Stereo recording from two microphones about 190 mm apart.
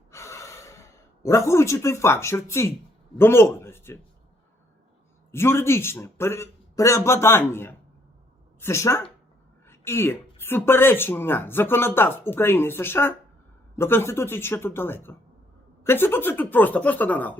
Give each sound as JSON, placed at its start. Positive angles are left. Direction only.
{"t": 0.1, "sound": "gasp", "side_deg": 15}
{"t": 1.2, "sound": "speech", "side_deg": 15}
{"t": 5.3, "sound": "speech", "side_deg": 15}